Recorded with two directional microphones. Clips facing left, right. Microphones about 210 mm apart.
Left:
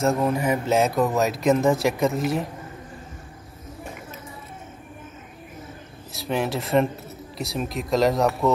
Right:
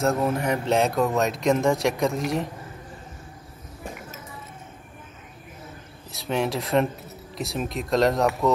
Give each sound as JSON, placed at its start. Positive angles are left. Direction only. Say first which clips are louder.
{"t": 0.0, "sound": "speech", "louder": "left 1 dB", "side_deg": 0}
{"t": 6.1, "sound": "speech", "louder": "even", "side_deg": 0}